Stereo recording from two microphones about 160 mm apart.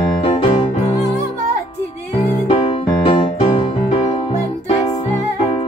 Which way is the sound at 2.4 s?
35° left (ahead or behind).